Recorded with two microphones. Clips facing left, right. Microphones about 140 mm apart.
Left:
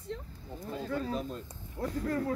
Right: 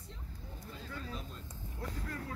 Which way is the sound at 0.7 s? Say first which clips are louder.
Left 12 dB; 55° left (ahead or behind).